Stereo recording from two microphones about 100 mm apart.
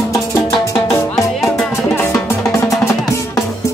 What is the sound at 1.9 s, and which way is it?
Music, 25° left (ahead or behind).